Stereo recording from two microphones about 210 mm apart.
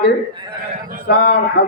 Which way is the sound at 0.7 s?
40° right (ahead or behind).